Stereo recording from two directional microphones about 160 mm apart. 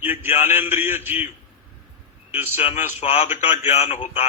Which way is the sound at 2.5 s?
40° left (ahead or behind).